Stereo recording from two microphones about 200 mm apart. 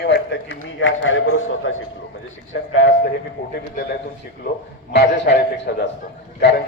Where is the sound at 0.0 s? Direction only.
60° left (ahead or behind).